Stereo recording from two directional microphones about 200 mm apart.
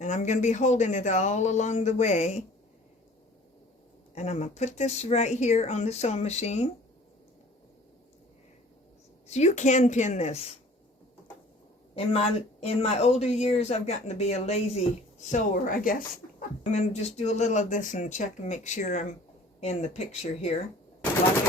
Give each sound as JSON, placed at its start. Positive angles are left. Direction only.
{"t": 0.0, "sound": "a woman's voice", "side_deg": 35}
{"t": 4.1, "sound": "a woman's voice", "side_deg": 35}
{"t": 9.2, "sound": "a woman's voice", "side_deg": 35}
{"t": 11.9, "sound": "a woman's voice", "side_deg": 30}